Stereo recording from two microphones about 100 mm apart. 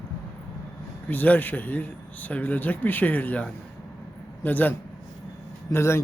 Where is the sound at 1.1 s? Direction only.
20° left (ahead or behind).